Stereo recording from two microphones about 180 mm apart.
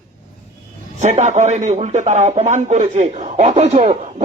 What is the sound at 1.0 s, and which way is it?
Music, 40° right (ahead or behind).